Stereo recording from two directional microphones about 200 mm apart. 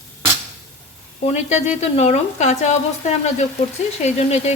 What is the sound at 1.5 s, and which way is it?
Speech, 35° left (ahead or behind).